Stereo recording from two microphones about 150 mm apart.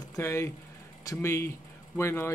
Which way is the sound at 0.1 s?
20° left (ahead or behind).